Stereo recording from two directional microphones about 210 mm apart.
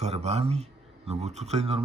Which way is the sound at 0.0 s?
30° right (ahead or behind).